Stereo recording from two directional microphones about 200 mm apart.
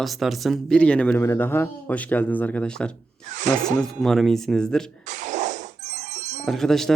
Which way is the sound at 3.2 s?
40° right (ahead or behind).